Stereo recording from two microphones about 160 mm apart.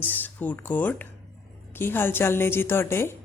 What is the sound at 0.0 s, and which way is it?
Speech, 10° left (ahead or behind).